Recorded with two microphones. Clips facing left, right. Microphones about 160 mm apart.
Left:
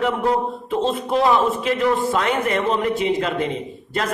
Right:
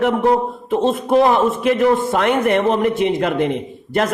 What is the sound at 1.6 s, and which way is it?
A man's voice, 60° right (ahead or behind).